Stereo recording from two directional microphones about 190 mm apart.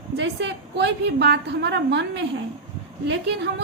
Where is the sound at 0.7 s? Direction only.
65° right (ahead or behind).